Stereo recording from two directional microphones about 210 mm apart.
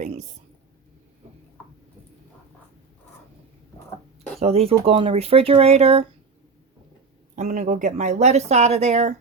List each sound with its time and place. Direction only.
0.0 s speech: 35° right (ahead or behind)
4.4 s speech: 30° right (ahead or behind)
7.3 s speech: 30° right (ahead or behind)